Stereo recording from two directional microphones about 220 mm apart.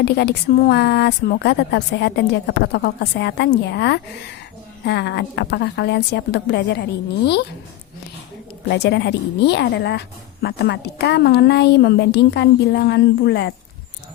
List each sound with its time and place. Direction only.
0.0 s a woman's voice: 50° left (ahead or behind)
8.7 s a woman's voice: 50° left (ahead or behind)